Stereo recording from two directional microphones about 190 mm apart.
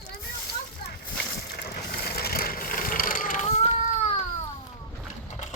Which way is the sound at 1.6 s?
55° left (ahead or behind).